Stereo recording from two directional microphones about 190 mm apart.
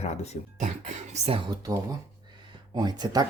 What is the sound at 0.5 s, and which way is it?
Speech, 40° right (ahead or behind).